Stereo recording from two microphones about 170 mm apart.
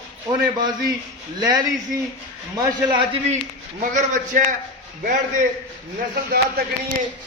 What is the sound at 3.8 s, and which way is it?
A man's voice, 50° right (ahead or behind).